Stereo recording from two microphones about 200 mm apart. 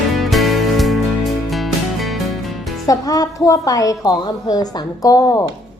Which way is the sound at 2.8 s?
20° left (ahead or behind).